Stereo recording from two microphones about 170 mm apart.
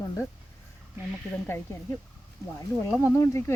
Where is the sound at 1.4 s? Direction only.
15° left (ahead or behind).